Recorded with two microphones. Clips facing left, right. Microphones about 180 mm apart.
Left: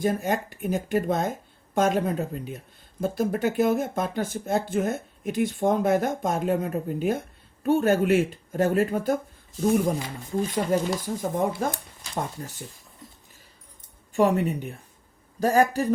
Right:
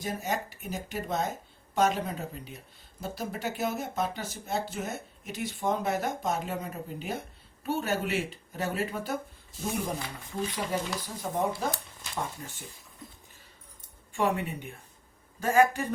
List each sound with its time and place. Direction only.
0.0 s speech: 55° left (ahead or behind)
10.5 s speech: 45° left (ahead or behind)
14.1 s a woman's voice: 40° left (ahead or behind)